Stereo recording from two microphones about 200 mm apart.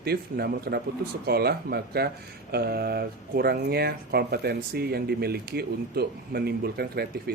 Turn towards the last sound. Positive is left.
turn(degrees=-50)  # may be behind; listen again after turning